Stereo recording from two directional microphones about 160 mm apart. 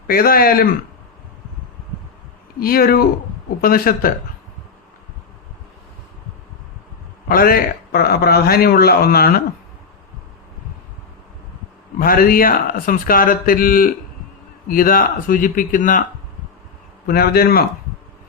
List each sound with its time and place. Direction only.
0.1 s speech: 65° left (ahead or behind)
2.6 s speech: 70° left (ahead or behind)
7.3 s speech: 65° left (ahead or behind)
11.9 s speech: 65° left (ahead or behind)
17.1 s speech: 70° left (ahead or behind)